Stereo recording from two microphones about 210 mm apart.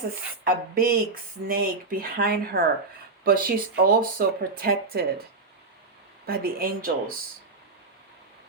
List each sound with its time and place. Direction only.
0.4 s speech: 45° right (ahead or behind)
6.2 s speech: 45° right (ahead or behind)